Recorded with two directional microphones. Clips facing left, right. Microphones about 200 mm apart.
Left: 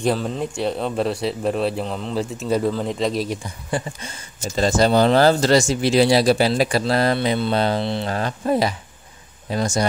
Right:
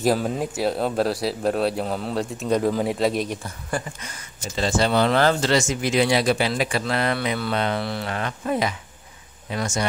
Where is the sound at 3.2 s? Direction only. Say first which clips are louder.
Left 3 dB; 15° left (ahead or behind).